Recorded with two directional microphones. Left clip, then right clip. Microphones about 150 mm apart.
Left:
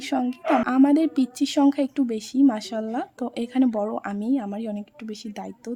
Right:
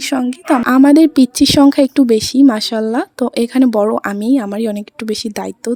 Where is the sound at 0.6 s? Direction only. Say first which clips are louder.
Right 14 dB; 45° right (ahead or behind).